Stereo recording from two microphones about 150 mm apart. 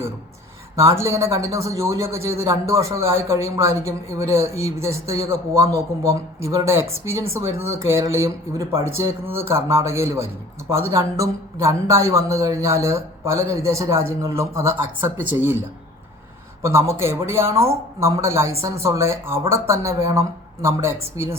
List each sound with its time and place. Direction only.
0.8 s speech: 20° right (ahead or behind)
16.6 s speech: 20° right (ahead or behind)